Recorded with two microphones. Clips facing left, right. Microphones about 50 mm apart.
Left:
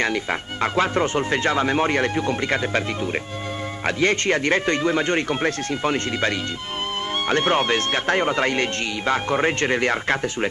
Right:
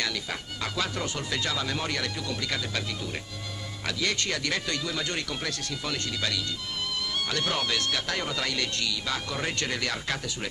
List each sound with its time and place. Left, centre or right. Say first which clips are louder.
0.0 s speech: left 9 dB; left
3.8 s speech: left 9 dB; left